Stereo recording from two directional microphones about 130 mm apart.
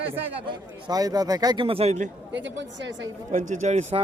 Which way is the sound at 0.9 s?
30° right (ahead or behind).